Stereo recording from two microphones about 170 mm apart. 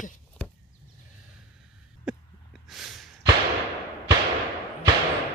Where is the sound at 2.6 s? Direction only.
Centre (ahead or behind).